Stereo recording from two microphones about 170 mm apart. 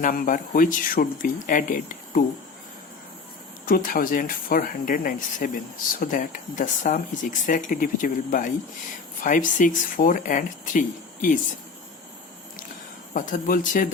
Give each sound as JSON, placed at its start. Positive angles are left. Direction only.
{"t": 0.0, "sound": "speech", "side_deg": 55}
{"t": 3.7, "sound": "speech", "side_deg": 55}
{"t": 13.1, "sound": "speech", "side_deg": 50}